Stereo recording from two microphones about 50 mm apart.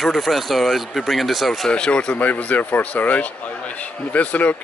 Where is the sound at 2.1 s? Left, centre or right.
Left.